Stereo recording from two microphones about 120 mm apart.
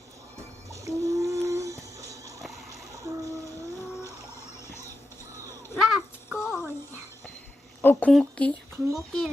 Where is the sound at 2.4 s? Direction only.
Centre (ahead or behind).